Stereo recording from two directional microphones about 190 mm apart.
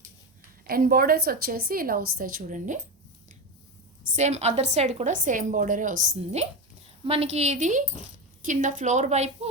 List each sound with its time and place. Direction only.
0.7 s a woman's voice: 50° right (ahead or behind)
4.1 s a woman's voice: 35° right (ahead or behind)